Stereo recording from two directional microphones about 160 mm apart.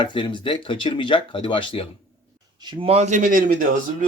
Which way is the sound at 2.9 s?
45° right (ahead or behind).